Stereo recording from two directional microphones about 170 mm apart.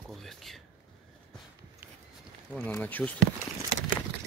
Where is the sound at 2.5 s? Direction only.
10° left (ahead or behind).